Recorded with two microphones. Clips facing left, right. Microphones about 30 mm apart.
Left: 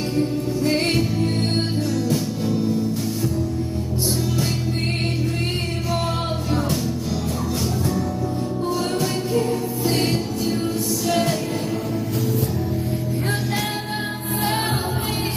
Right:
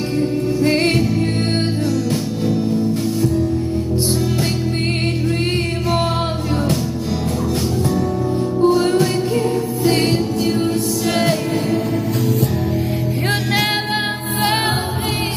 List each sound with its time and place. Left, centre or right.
0.6 s music: right
8.6 s music: right
11.0 s music: right